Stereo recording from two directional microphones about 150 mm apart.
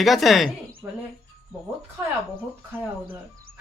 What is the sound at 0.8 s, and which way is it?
Speech, 15° right (ahead or behind).